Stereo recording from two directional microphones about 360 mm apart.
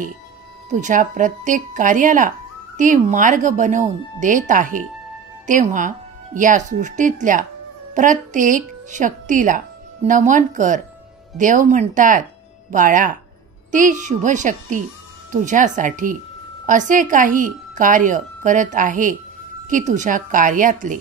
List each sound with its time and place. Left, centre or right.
0.7 s speech: centre